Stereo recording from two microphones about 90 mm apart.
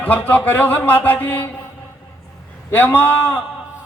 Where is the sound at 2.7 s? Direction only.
20° left (ahead or behind).